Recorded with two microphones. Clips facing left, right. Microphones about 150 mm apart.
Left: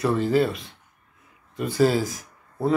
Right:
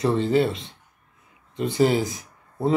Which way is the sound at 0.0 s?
25° right (ahead or behind).